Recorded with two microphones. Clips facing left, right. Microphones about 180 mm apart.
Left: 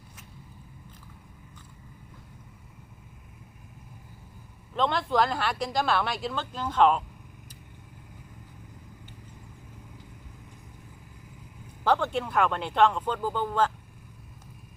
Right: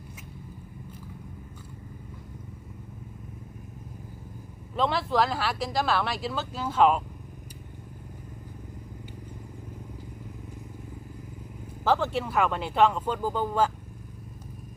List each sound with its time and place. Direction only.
4.7 s speech: 5° right (ahead or behind)
11.8 s speech: 5° right (ahead or behind)